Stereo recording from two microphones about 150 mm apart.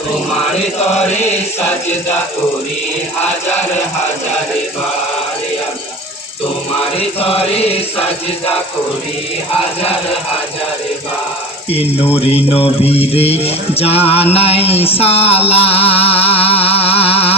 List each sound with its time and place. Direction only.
6.9 s music: 40° left (ahead or behind)
12.2 s music: 40° left (ahead or behind)